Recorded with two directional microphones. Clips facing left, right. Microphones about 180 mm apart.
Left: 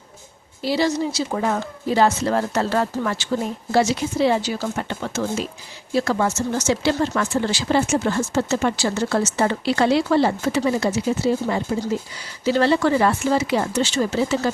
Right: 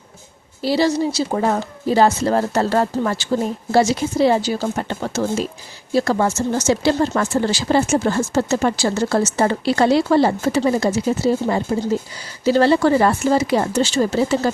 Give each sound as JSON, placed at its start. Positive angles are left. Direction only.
{"t": 0.6, "sound": "speech", "side_deg": -35}